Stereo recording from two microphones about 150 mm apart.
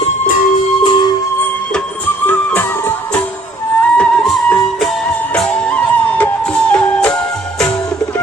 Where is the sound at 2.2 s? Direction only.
15° left (ahead or behind).